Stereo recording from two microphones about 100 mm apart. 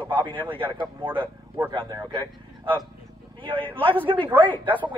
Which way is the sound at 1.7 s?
45° right (ahead or behind).